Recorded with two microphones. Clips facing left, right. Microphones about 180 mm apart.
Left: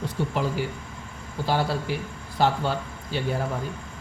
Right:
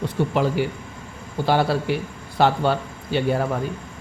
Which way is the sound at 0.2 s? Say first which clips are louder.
Right 6 dB; 65° right (ahead or behind).